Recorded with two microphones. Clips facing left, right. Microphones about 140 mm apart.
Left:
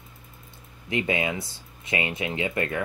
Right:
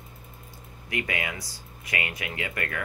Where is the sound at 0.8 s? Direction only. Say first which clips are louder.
Left 6 dB; 25° left (ahead or behind).